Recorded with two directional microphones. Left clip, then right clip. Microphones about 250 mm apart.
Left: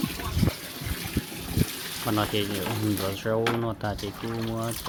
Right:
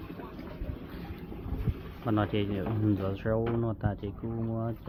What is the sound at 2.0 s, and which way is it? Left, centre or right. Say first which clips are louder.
Speech: left 3 dB; centre.